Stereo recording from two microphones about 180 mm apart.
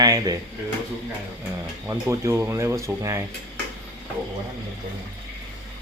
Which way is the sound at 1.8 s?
15° right (ahead or behind).